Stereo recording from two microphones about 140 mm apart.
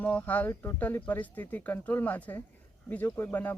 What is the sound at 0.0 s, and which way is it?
Speech, 10° left (ahead or behind).